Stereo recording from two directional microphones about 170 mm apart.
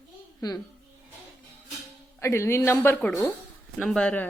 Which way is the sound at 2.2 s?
15° left (ahead or behind).